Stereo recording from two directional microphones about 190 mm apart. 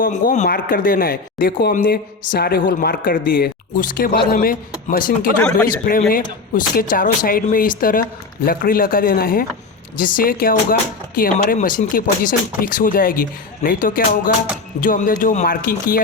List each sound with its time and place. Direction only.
0.0 s speech: 45° left (ahead or behind)